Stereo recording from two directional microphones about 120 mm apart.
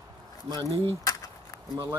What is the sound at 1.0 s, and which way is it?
Keys jangling, 30° left (ahead or behind).